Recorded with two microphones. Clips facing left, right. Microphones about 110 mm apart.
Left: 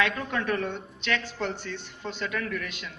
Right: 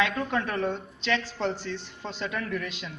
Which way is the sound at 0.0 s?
10° right (ahead or behind).